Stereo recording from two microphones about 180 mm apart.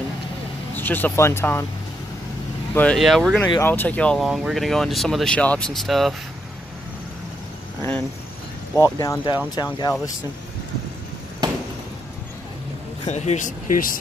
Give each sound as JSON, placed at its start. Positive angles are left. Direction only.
{"t": 0.7, "sound": "speech", "side_deg": 10}
{"t": 2.7, "sound": "speech", "side_deg": 5}
{"t": 3.4, "sound": "speech", "side_deg": 15}
{"t": 8.7, "sound": "speech", "side_deg": 15}
{"t": 13.0, "sound": "speech", "side_deg": 40}